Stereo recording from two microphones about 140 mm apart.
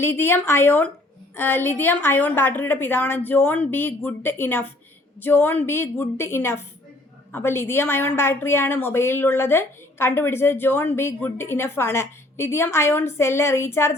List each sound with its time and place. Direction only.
0.0 s a woman's voice: 15° left (ahead or behind)